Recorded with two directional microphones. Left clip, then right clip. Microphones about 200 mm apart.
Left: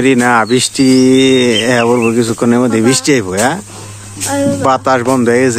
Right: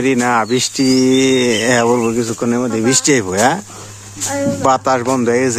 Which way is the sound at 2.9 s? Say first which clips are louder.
Left 2 dB; 15° right (ahead or behind).